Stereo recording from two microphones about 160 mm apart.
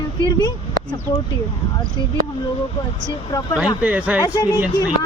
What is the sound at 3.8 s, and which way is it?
Speech, 10° right (ahead or behind).